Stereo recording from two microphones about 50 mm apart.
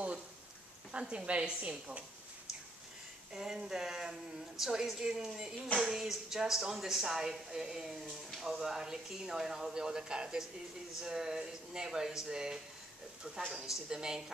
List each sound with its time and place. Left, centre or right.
0.9 s a woman's voice: right
3.3 s speech: centre